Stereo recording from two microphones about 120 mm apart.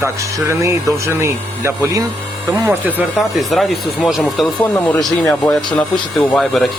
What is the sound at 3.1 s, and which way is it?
Speech, centre (ahead or behind).